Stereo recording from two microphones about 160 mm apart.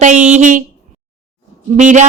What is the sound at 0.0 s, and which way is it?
Speech, 50° right (ahead or behind).